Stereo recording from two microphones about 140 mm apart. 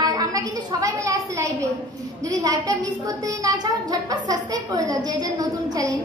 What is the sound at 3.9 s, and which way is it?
A woman's voice, 25° right (ahead or behind).